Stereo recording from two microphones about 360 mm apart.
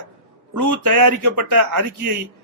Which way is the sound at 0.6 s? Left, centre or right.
Right.